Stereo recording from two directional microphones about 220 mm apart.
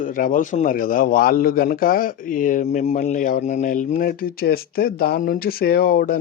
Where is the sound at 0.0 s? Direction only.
40° left (ahead or behind).